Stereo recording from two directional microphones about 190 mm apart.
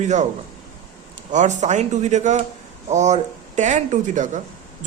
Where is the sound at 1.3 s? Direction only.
40° right (ahead or behind).